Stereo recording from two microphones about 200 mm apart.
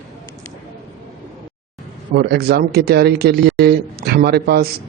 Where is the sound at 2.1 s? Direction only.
50° right (ahead or behind).